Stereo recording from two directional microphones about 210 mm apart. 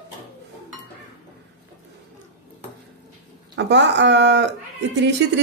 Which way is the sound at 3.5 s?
55° right (ahead or behind).